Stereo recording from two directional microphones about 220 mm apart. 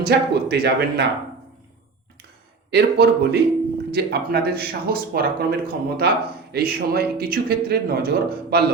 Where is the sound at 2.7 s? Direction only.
50° right (ahead or behind).